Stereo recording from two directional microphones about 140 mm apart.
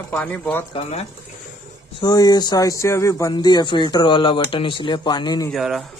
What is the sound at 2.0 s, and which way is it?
Speech, 30° left (ahead or behind).